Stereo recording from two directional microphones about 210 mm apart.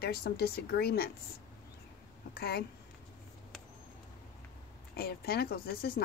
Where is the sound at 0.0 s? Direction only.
50° left (ahead or behind).